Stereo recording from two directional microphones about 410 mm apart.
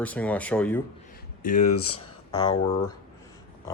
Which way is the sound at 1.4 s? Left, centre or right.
Centre.